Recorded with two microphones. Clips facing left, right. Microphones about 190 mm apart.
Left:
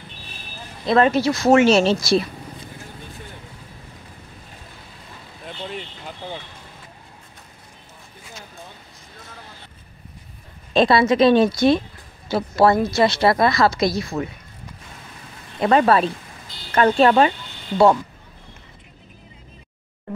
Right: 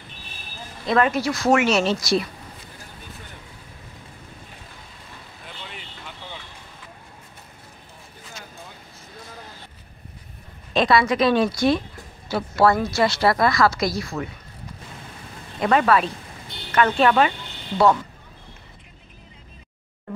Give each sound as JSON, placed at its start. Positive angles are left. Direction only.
{"t": 0.8, "sound": "speech", "side_deg": 30}
{"t": 10.7, "sound": "speech", "side_deg": 30}
{"t": 15.6, "sound": "speech", "side_deg": 30}